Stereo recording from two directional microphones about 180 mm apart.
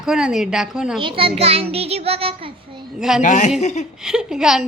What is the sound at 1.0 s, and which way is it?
A child's voice, 30° right (ahead or behind).